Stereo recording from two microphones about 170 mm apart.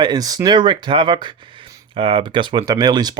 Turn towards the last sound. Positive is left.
turn(degrees=-25)  # may be behind; listen again after turning